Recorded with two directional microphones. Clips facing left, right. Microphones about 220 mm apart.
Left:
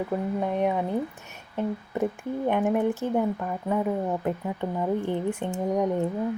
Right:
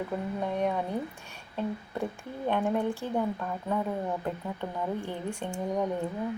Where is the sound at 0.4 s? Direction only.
15° left (ahead or behind).